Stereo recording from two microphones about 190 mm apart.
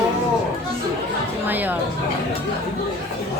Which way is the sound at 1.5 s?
10° right (ahead or behind).